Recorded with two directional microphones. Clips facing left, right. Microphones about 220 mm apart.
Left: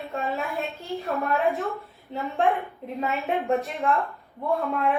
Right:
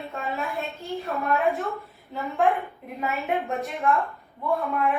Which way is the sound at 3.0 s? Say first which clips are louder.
Left 1 dB; centre (ahead or behind).